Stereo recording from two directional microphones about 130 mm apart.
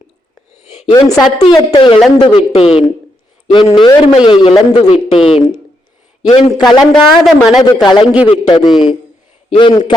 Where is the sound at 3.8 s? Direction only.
35° left (ahead or behind).